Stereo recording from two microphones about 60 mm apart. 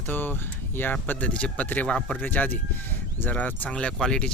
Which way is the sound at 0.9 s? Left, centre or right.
Left.